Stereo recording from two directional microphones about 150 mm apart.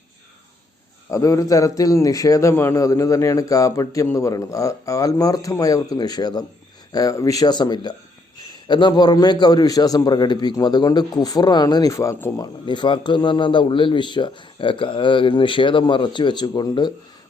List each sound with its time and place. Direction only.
1.1 s a man's voice: 20° left (ahead or behind)
12.6 s a man's voice: 30° left (ahead or behind)